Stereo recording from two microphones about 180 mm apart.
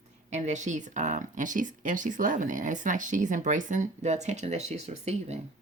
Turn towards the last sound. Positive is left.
turn(degrees=-40)  # may be behind; listen again after turning